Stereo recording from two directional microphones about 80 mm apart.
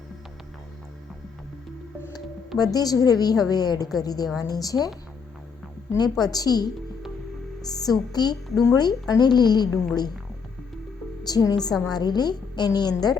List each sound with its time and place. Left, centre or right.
2.6 s a woman's voice: left
6.0 s a woman's voice: left
7.7 s a woman's voice: left
11.2 s a woman's voice: left